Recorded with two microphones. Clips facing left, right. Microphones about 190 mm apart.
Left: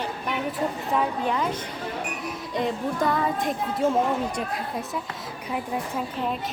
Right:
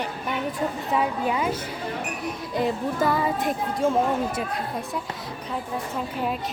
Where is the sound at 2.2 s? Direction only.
5° right (ahead or behind).